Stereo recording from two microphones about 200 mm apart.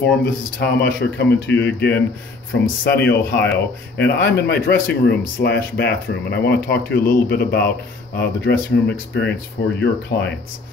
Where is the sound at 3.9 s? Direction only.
55° left (ahead or behind).